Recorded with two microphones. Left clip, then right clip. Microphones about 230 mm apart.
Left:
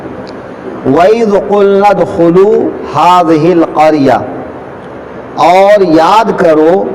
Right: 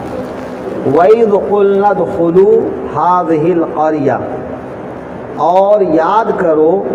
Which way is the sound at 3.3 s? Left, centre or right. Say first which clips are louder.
Left 5 dB; left.